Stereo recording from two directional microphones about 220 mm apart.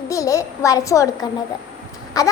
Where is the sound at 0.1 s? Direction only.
15° left (ahead or behind).